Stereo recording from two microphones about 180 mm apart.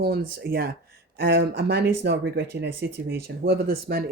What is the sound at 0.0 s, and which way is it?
Speech, 55° right (ahead or behind).